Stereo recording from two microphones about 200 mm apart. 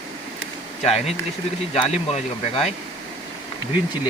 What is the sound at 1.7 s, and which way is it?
Speech, 30° left (ahead or behind).